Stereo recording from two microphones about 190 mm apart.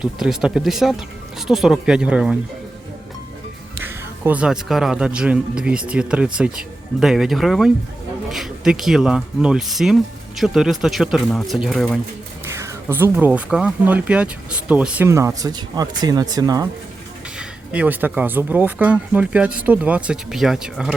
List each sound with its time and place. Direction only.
0.0 s speech: 5° right (ahead or behind)
3.8 s speech: 10° right (ahead or behind)
12.5 s speech: 15° right (ahead or behind)
17.3 s speech: 5° right (ahead or behind)